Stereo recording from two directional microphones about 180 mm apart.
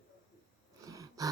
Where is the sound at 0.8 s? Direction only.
20° right (ahead or behind).